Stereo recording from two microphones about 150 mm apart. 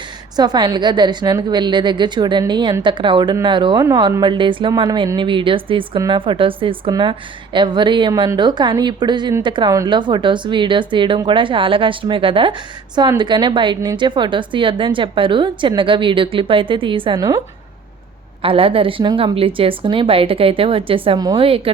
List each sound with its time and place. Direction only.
0.3 s a woman's voice: 30° right (ahead or behind)
18.4 s a woman's voice: 35° right (ahead or behind)